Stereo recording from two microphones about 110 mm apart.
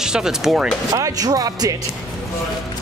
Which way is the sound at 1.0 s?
35° right (ahead or behind).